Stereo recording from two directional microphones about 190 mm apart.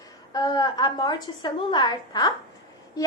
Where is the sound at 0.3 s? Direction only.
20° left (ahead or behind).